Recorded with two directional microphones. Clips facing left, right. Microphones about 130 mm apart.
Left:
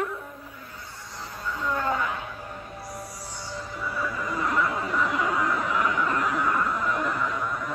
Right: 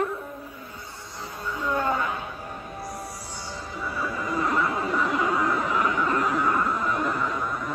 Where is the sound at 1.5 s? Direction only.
20° right (ahead or behind).